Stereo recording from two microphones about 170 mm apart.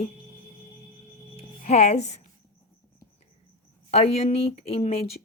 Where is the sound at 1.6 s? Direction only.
40° left (ahead or behind).